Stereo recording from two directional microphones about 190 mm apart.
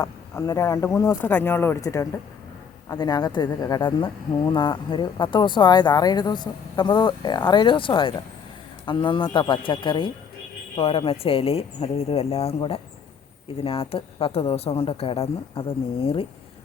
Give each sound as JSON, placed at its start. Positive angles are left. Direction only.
{"t": 0.0, "sound": "a woman's voice", "side_deg": 20}